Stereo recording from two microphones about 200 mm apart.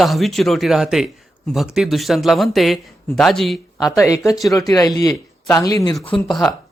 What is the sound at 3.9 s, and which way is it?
Speech, 15° left (ahead or behind).